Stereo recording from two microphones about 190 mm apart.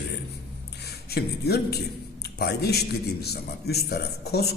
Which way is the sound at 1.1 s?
55° left (ahead or behind).